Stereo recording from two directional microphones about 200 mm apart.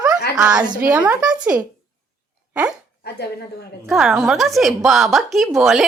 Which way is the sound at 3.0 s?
55° left (ahead or behind).